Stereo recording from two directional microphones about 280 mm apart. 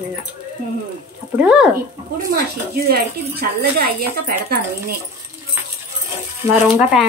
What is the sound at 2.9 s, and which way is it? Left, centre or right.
Speech, right.